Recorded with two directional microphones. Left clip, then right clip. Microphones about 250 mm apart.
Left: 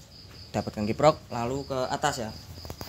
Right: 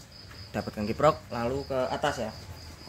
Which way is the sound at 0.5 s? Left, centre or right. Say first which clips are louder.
Left 2 dB; centre.